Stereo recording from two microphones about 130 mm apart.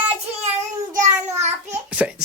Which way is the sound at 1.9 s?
10° right (ahead or behind).